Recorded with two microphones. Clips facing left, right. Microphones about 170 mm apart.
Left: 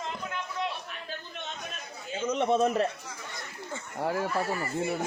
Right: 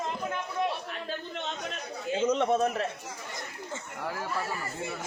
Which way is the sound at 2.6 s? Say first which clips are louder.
Left 3 dB; 35° left (ahead or behind).